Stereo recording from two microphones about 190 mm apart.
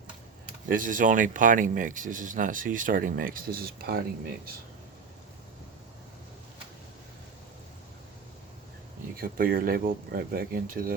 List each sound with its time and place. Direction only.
0.7 s speech: 45° right (ahead or behind)
9.2 s speech: 50° right (ahead or behind)